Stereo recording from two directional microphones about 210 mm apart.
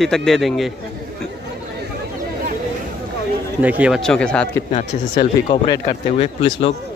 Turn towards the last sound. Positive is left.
turn(degrees=25)  # may be behind; listen again after turning